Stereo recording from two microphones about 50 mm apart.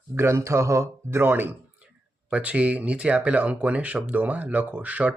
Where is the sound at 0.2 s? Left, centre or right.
Right.